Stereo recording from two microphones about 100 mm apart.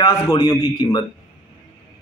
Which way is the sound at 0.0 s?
45° left (ahead or behind).